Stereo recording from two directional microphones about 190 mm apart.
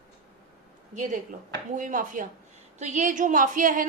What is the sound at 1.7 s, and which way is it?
A woman's voice, 45° right (ahead or behind).